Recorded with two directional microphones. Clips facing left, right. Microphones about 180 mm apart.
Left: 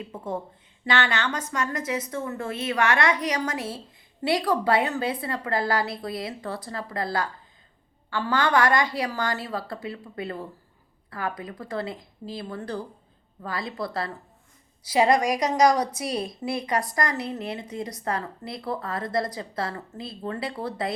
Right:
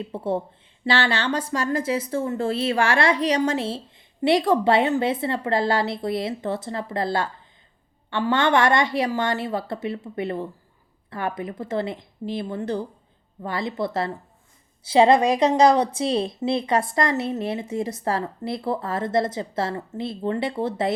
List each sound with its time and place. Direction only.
0.0 s a woman's voice: 30° right (ahead or behind)